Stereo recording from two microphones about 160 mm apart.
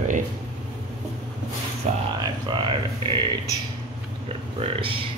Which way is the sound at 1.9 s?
45° right (ahead or behind).